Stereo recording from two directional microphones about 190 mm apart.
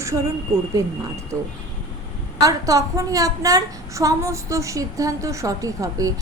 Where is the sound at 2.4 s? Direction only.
15° right (ahead or behind).